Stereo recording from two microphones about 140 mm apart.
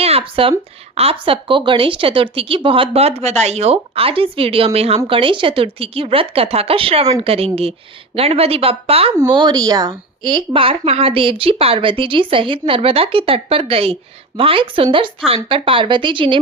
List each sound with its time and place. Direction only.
0.0 s a sound: 45° right (ahead or behind)
0.9 s a woman's voice: 40° right (ahead or behind)
9.3 s a woman's voice: 30° right (ahead or behind)